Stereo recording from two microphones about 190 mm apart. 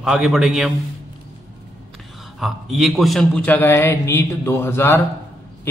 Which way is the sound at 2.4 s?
Centre (ahead or behind).